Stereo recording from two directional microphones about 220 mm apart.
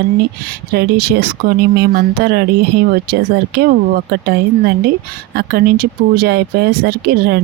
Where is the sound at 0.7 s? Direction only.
45° right (ahead or behind).